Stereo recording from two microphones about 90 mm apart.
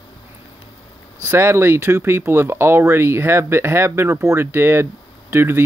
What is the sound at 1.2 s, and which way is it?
Speech, 30° right (ahead or behind).